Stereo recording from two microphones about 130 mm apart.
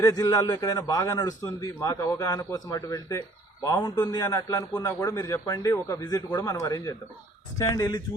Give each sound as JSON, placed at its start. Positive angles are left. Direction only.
{"t": 0.0, "sound": "a man's voice", "side_deg": 30}